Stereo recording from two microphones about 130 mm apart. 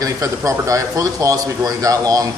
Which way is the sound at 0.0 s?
25° right (ahead or behind).